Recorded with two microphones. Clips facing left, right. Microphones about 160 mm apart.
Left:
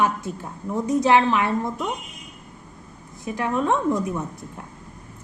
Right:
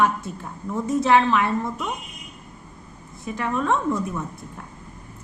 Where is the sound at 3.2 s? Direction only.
15° left (ahead or behind).